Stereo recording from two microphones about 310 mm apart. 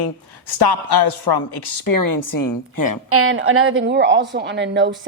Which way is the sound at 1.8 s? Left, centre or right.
Left.